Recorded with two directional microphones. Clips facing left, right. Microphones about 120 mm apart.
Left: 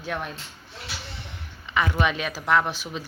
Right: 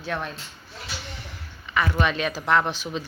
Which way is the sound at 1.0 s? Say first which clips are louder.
Right 1 dB; 25° left (ahead or behind).